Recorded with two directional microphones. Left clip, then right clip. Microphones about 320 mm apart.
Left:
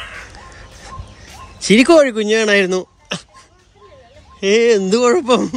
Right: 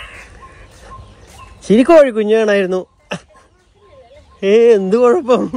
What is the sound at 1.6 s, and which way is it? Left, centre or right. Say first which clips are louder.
Speech: right 2 dB; centre.